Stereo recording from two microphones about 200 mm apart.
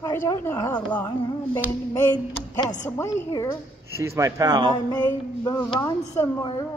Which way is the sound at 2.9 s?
15° left (ahead or behind).